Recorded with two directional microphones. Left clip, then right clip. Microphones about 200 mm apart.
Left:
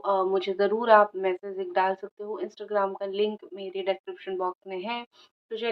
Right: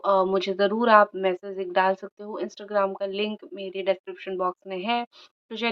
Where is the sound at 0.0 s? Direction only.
40° right (ahead or behind).